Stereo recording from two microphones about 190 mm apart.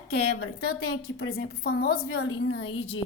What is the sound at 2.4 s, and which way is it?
Speech, 90° left.